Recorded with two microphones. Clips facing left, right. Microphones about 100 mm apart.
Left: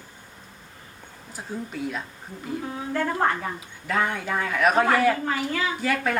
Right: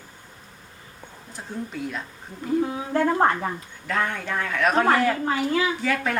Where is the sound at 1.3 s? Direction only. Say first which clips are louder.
Even; centre (ahead or behind).